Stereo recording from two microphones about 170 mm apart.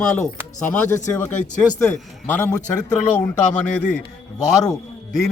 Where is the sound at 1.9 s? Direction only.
10° left (ahead or behind).